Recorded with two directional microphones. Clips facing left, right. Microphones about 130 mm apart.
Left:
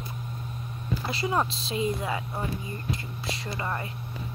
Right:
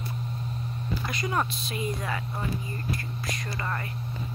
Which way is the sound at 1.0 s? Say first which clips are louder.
Left 3 dB; 25° left (ahead or behind).